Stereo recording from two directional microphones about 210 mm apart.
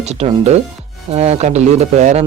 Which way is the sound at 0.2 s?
30° right (ahead or behind).